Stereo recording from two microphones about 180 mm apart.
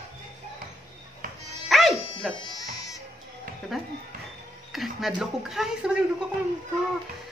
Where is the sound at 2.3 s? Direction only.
20° left (ahead or behind).